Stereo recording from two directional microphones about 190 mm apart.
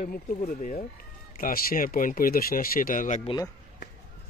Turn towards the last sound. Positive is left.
turn(degrees=20)  # may be behind; listen again after turning